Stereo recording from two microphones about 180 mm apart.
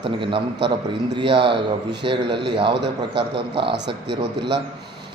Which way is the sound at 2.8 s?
65° right (ahead or behind).